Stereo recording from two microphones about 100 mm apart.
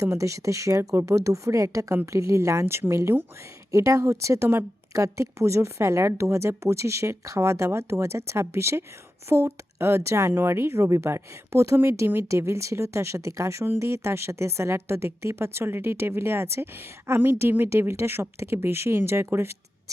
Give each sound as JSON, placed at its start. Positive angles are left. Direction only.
{"t": 0.0, "sound": "a woman's voice", "side_deg": -30}